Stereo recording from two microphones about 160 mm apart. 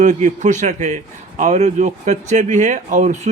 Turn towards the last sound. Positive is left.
turn(degrees=-50)  # may be behind; listen again after turning